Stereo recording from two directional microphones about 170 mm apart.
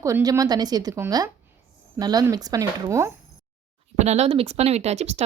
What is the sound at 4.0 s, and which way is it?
Speech, 40° right (ahead or behind).